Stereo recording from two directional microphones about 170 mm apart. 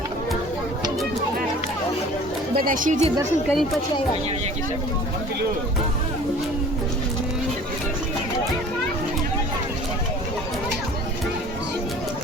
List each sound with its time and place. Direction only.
2.6 s speech: 55° right (ahead or behind)
3.5 s speech: centre (ahead or behind)